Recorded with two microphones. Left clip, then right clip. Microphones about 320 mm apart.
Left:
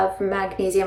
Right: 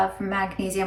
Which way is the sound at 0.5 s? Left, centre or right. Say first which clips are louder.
Left 8 dB; left.